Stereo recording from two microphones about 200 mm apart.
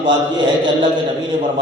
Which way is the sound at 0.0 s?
25° right (ahead or behind).